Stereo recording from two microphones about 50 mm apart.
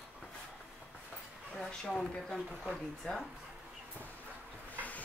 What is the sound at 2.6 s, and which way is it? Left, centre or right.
Speech, centre.